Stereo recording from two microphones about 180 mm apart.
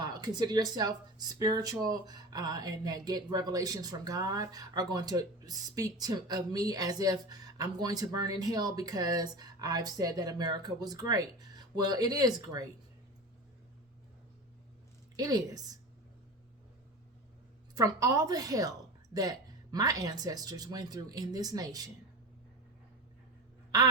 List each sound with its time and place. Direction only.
0.0 s speech: 25° right (ahead or behind)
15.1 s a woman's voice: 20° right (ahead or behind)
17.7 s speech: 20° right (ahead or behind)